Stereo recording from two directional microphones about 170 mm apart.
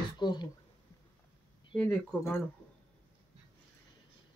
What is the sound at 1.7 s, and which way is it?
Speech, 10° left (ahead or behind).